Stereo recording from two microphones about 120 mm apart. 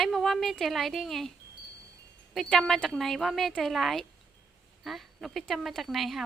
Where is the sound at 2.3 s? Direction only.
Centre (ahead or behind).